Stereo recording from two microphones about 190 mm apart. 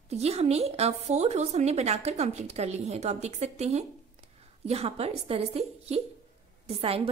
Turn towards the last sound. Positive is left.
turn(degrees=-30)  # may be behind; listen again after turning